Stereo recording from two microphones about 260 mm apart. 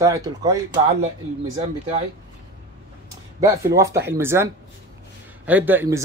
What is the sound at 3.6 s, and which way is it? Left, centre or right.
Speech, centre.